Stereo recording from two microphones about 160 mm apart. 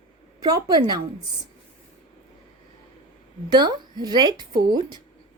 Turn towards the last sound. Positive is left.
turn(degrees=-25)  # may be behind; listen again after turning